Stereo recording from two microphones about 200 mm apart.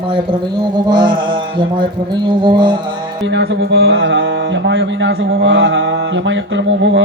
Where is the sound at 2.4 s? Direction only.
20° right (ahead or behind).